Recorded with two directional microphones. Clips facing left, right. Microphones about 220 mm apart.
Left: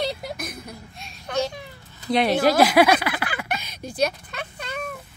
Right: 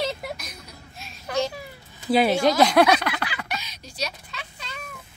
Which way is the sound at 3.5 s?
55° left (ahead or behind).